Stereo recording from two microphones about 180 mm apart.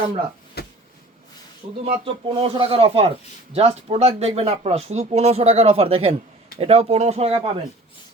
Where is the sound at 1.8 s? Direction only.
30° right (ahead or behind).